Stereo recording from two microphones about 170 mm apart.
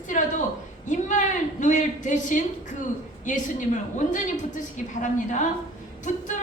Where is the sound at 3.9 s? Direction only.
45° left (ahead or behind).